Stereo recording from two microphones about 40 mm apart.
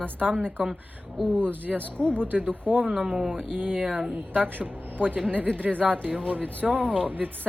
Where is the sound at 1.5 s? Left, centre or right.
Right.